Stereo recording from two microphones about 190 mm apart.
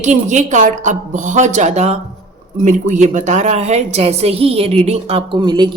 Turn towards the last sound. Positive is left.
turn(degrees=-25)  # may be behind; listen again after turning